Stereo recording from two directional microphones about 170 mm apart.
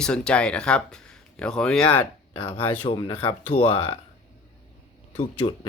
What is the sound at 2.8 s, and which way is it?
Speech, 20° left (ahead or behind).